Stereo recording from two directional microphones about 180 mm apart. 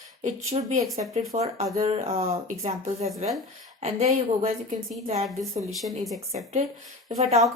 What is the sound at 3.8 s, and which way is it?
Speech, 35° right (ahead or behind).